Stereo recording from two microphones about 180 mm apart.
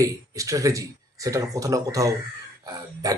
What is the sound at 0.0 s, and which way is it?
Speech, 20° right (ahead or behind).